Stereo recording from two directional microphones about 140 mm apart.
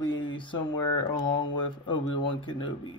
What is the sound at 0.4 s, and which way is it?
Speech, 35° left (ahead or behind).